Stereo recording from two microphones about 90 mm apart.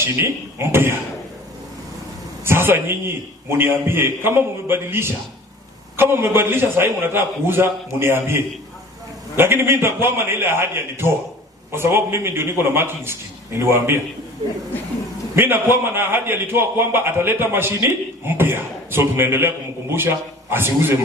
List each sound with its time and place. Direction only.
0.0 s a man's voice: 25° right (ahead or behind)
2.4 s a man's voice: 25° right (ahead or behind)
15.4 s a man's voice: 25° right (ahead or behind)